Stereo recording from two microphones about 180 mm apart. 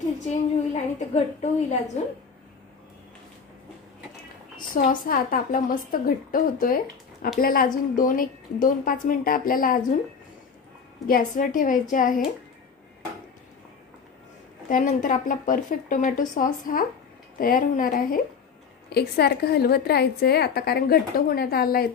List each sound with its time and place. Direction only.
0.2 s a woman's voice: 40° left (ahead or behind)
4.6 s a woman's voice: 50° left (ahead or behind)
11.1 s a woman's voice: 50° left (ahead or behind)
14.7 s a woman's voice: 45° left (ahead or behind)
18.9 s a woman's voice: 60° left (ahead or behind)